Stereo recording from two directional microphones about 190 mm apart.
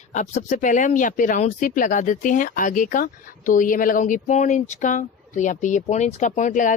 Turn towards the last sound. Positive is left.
turn(degrees=40)  # may be behind; listen again after turning